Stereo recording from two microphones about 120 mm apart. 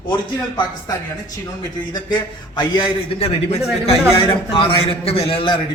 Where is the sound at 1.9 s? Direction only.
35° left (ahead or behind).